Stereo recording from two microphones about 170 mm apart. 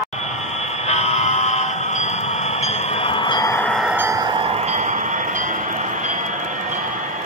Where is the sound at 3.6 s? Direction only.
Centre (ahead or behind).